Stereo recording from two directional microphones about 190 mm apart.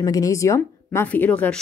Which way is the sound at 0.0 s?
15° left (ahead or behind).